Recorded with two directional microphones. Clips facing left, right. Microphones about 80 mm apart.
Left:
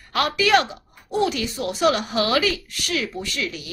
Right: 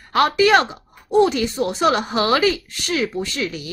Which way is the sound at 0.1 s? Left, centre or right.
Right.